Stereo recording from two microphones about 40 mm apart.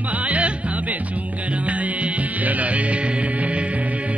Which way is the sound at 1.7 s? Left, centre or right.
Right.